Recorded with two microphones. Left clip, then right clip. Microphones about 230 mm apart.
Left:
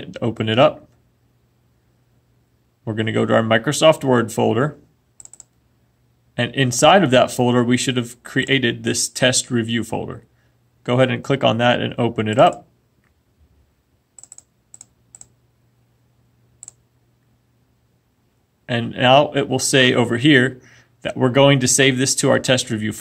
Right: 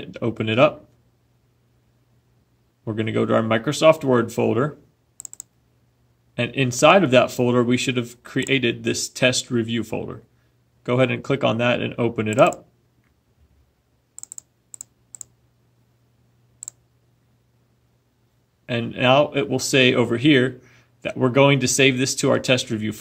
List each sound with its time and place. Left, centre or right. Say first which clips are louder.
0.0 s speech: left 2 dB; centre
2.8 s speech: left 2 dB; centre
5.1 s typing: right 4 dB; right
6.3 s speech: left 3 dB; centre
14.1 s typing: right 4 dB; right
18.7 s speech: left 4 dB; centre